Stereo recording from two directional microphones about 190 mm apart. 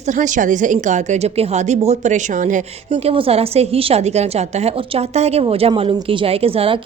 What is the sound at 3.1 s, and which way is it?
A woman's voice, 30° right (ahead or behind).